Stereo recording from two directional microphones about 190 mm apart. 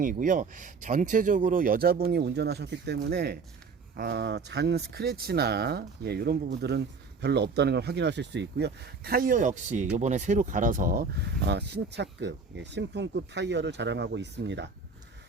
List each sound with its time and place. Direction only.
0.0 s speech: 45° right (ahead or behind); by 14.7 s 65° right (ahead or behind)